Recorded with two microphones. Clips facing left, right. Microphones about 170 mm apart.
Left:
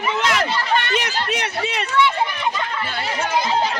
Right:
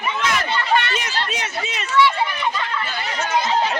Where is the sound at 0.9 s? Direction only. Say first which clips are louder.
Left 3 dB; 65° left (ahead or behind).